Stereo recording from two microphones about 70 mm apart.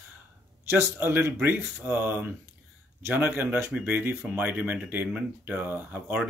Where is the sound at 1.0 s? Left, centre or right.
Right.